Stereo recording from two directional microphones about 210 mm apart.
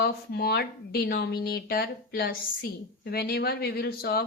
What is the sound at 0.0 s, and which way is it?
A woman's voice, 50° left (ahead or behind).